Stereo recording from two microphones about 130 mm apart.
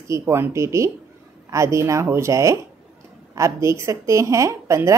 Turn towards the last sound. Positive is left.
turn(degrees=-20)  # may be behind; listen again after turning